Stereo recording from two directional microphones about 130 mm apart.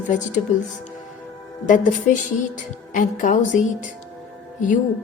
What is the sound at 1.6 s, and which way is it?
Speech, 80° left.